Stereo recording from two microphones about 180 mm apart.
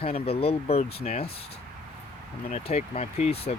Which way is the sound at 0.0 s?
35° left (ahead or behind).